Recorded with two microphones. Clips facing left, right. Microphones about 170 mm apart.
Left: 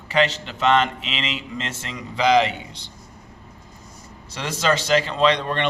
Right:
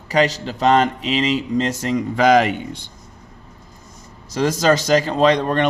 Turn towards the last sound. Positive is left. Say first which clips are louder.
# right 4 dB
turn(degrees=-45)  # may be behind; listen again after turning